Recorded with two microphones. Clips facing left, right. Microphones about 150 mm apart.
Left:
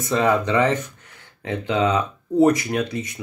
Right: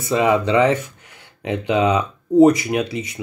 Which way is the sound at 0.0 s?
10° right (ahead or behind).